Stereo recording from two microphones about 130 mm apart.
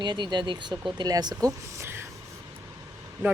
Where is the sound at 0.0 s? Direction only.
35° right (ahead or behind).